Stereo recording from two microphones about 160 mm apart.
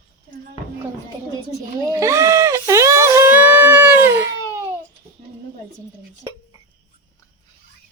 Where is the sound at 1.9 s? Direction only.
20° right (ahead or behind).